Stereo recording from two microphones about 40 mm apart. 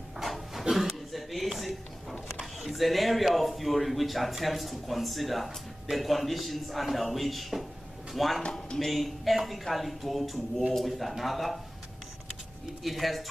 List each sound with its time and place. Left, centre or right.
0.2 s a sound: centre
2.6 s speech: centre
12.8 s speech: centre